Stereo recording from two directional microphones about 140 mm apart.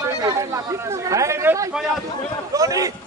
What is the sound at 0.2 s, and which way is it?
Speech, 25° right (ahead or behind).